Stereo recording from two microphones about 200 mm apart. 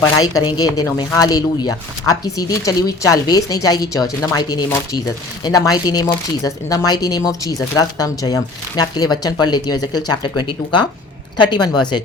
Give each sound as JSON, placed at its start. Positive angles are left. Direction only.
{"t": 0.3, "sound": "speech", "side_deg": 20}